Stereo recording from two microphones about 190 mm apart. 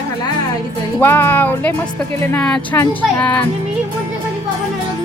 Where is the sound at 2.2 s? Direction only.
10° left (ahead or behind).